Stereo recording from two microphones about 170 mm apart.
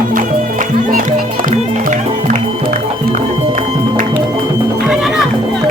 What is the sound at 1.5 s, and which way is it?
Music, 50° right (ahead or behind).